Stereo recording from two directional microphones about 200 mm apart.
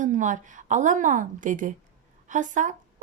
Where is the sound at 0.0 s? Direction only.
40° right (ahead or behind).